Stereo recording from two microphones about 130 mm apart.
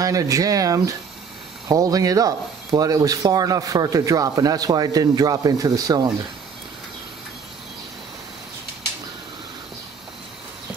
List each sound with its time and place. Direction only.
0.0 s speech: 25° right (ahead or behind)